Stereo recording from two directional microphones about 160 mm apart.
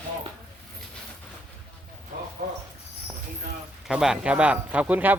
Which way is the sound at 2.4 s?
65° right (ahead or behind).